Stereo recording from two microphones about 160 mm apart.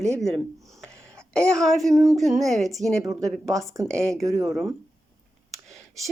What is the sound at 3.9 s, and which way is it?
Speech, 5° left (ahead or behind).